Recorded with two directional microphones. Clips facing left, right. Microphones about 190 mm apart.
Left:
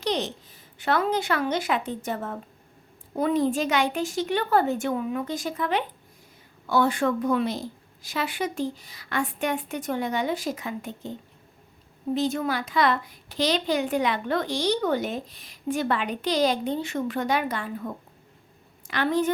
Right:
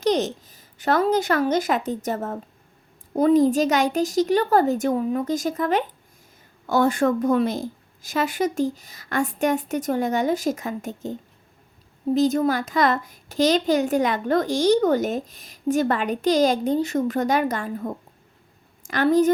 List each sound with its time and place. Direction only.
0.0 s a woman's voice: 45° right (ahead or behind)
12.1 s a child's voice: 40° right (ahead or behind)